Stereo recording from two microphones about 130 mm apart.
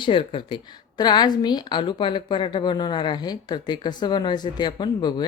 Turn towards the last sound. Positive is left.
turn(degrees=35)  # may be behind; listen again after turning